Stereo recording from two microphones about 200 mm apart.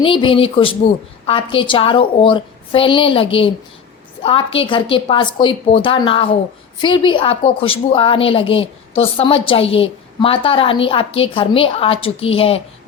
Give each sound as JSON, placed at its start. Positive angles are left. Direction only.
{"t": 0.0, "sound": "a woman's voice", "side_deg": 25}